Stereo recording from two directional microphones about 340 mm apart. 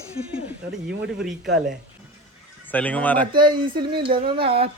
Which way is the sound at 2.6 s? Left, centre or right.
Centre.